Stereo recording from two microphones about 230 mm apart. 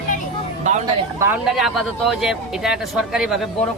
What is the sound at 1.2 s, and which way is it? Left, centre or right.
Speech, centre.